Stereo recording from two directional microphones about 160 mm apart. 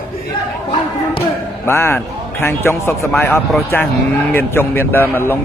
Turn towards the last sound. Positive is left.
turn(degrees=10)  # may be behind; listen again after turning